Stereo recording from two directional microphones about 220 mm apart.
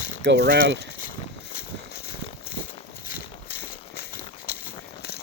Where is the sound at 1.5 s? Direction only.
45° left (ahead or behind).